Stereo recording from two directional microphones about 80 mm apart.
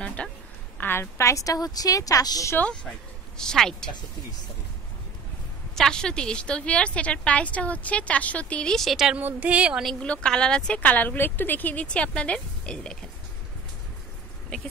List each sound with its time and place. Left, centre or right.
0.0 s a sound: centre
0.7 s a woman's voice: left
3.3 s a woman's voice: centre
5.8 s a woman's voice: centre
9.2 s speech: centre
9.9 s a woman's voice: centre